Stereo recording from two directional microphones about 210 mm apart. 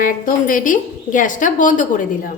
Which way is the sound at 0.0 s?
40° left (ahead or behind).